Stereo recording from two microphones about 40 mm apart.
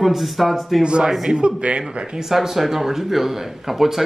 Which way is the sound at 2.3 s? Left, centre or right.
Centre.